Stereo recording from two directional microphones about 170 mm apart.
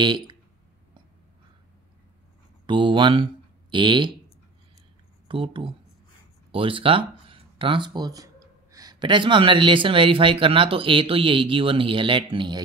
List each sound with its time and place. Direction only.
0.0 s speech: 30° right (ahead or behind)
2.6 s speech: 30° right (ahead or behind)
5.3 s speech: 30° right (ahead or behind)